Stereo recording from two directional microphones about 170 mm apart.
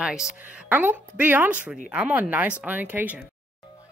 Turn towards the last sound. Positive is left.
turn(degrees=-10)  # may be behind; listen again after turning